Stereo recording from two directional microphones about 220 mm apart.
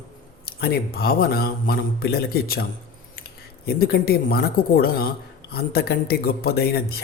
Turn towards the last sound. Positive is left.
turn(degrees=45)  # may be behind; listen again after turning